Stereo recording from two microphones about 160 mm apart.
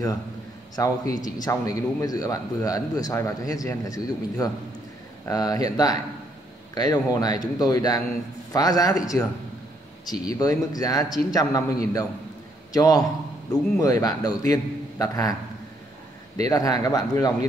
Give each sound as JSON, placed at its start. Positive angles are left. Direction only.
{"t": 0.7, "sound": "a man's voice", "side_deg": 20}
{"t": 16.4, "sound": "a man's voice", "side_deg": 20}